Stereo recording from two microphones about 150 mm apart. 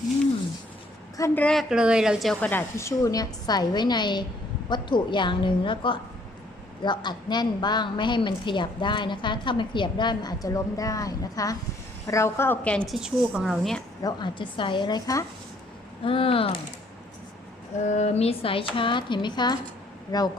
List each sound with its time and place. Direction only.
1.4 s a woman's voice: 5° left (ahead or behind)
1.7 s a woman's voice: 5° right (ahead or behind)
2.5 s a woman's voice: 15° left (ahead or behind); by 13.8 s centre (ahead or behind)
14.0 s a woman's voice: 30° left (ahead or behind)
16.0 s a woman's voice: 35° left (ahead or behind)
17.8 s a woman's voice: 50° left (ahead or behind); by 20.3 s 25° left (ahead or behind)